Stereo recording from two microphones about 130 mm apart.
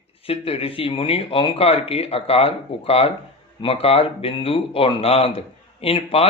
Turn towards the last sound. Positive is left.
turn(degrees=50)  # may be behind; listen again after turning